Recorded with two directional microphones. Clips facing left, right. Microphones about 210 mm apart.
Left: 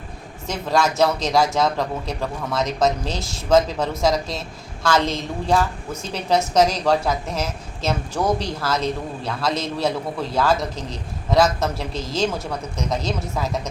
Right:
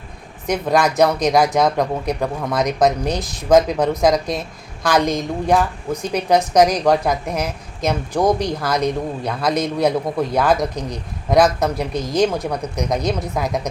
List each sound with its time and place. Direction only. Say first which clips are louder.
0.4 s speech: right 4 dB; 15° right (ahead or behind)